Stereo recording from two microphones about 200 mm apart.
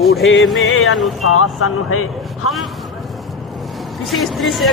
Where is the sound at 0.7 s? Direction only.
90° left.